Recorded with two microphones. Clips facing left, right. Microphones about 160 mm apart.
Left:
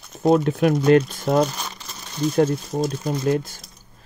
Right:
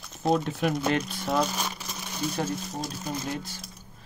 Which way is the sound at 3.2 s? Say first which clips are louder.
Left 12 dB; 50° left (ahead or behind).